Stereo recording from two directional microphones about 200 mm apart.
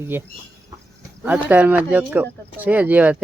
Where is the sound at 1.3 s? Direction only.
10° right (ahead or behind).